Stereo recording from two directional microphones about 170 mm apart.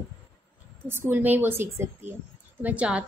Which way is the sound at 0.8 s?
15° right (ahead or behind).